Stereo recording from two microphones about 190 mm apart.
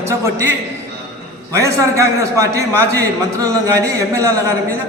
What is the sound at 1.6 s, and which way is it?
A man's voice, 15° right (ahead or behind).